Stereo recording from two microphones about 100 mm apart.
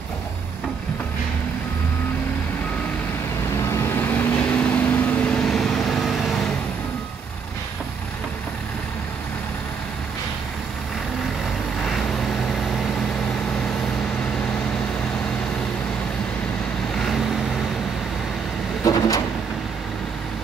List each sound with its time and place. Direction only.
3.5 s vehicle: 30° left (ahead or behind); by 6.5 s centre (ahead or behind)
11.8 s vehicle: 5° left (ahead or behind)
18.9 s vehicle: 35° left (ahead or behind)